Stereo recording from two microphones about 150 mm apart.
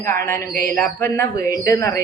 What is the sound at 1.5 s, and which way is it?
Speech, 20° left (ahead or behind).